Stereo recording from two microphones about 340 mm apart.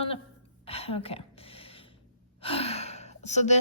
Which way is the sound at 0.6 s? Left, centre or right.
Centre.